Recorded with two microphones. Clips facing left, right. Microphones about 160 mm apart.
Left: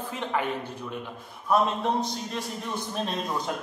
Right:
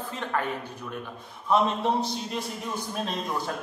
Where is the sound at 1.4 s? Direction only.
Centre (ahead or behind).